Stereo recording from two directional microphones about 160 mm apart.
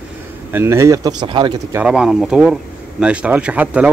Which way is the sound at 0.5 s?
15° right (ahead or behind).